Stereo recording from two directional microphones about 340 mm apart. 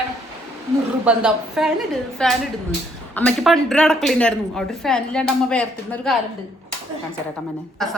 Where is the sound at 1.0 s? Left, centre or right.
Centre.